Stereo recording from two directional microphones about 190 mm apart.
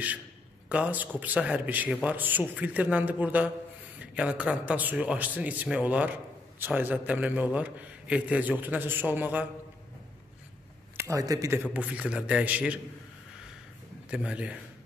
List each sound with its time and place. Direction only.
0.7 s a man's voice: 5° right (ahead or behind)
11.0 s a man's voice: 15° right (ahead or behind)
14.1 s a man's voice: 5° right (ahead or behind)